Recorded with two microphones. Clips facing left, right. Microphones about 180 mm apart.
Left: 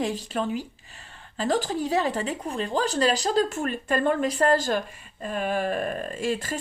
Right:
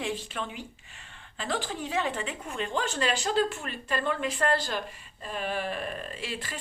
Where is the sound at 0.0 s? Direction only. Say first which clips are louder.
Left 6 dB; 40° left (ahead or behind).